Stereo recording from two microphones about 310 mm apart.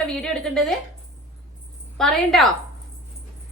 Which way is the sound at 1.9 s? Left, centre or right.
Centre.